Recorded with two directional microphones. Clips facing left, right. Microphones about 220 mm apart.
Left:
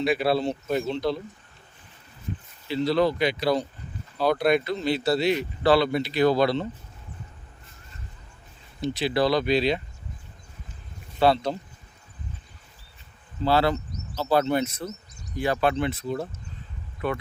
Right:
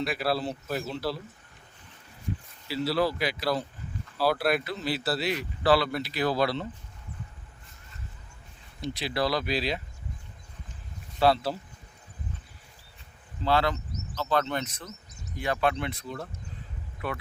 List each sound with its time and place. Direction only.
0.0 s speech: centre (ahead or behind)
2.6 s speech: 5° right (ahead or behind)
8.8 s speech: centre (ahead or behind)
11.2 s speech: centre (ahead or behind)
13.4 s speech: 35° left (ahead or behind)
14.1 s speech: 10° left (ahead or behind)
15.4 s speech: 35° left (ahead or behind)